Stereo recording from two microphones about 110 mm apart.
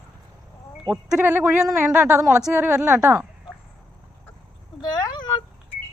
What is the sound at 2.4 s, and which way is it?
Speech, 10° right (ahead or behind).